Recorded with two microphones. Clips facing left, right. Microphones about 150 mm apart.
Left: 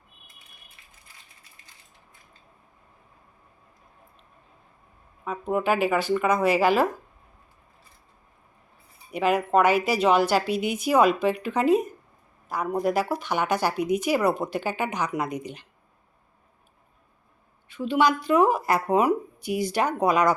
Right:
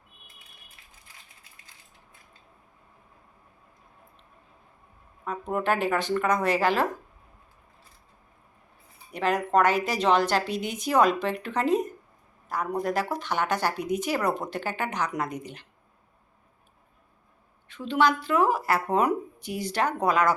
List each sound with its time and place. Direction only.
5.2 s a woman's voice: 5° left (ahead or behind)
9.1 s a woman's voice: 10° left (ahead or behind)
17.7 s a woman's voice: 10° left (ahead or behind)